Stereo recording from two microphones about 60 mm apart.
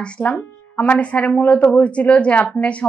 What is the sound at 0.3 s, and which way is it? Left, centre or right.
A woman's voice, left.